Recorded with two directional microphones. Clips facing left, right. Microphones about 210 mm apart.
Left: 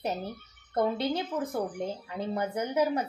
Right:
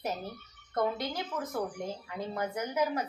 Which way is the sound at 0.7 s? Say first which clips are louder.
Left 4 dB; 30° left (ahead or behind).